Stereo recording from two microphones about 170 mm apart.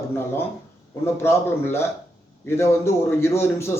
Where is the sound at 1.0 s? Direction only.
15° left (ahead or behind).